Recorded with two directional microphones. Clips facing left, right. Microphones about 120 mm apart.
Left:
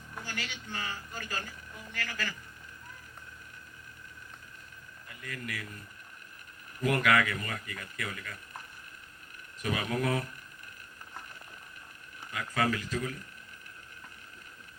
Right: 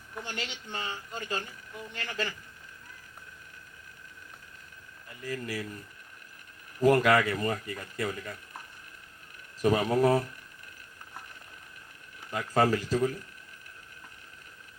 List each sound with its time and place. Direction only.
0.3 s speech: 25° right (ahead or behind)
5.2 s speech: 30° right (ahead or behind)
6.8 s speech: 30° right (ahead or behind)
9.6 s speech: 35° right (ahead or behind)
12.3 s speech: 35° right (ahead or behind)